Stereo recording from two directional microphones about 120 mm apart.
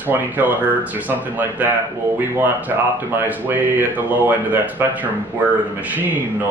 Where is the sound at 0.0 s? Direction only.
15° right (ahead or behind).